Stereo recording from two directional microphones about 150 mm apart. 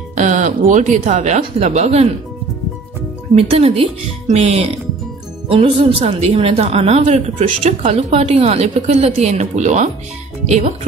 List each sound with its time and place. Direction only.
0.1 s a woman's voice: 55° right (ahead or behind)
3.3 s a woman's voice: 40° right (ahead or behind)